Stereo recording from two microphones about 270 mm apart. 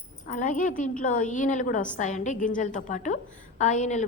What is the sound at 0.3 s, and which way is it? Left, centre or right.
A woman's voice, left.